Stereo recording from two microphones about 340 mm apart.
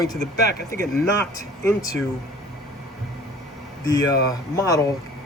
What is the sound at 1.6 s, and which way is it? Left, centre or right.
Speech, centre.